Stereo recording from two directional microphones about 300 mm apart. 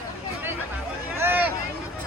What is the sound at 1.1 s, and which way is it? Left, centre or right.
Vehicle, centre.